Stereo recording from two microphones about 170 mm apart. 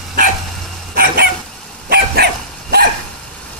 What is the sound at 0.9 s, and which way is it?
Dog, 60° right (ahead or behind).